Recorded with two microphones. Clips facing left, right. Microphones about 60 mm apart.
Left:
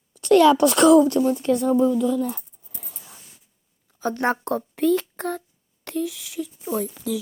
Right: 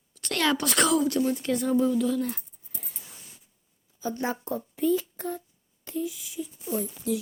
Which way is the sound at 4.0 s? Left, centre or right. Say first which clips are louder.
Left 7 dB; left.